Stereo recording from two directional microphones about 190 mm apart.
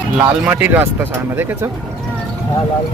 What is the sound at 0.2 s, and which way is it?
Speech, 5° right (ahead or behind).